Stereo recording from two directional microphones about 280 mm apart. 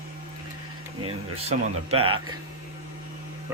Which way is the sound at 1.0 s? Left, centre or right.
Right.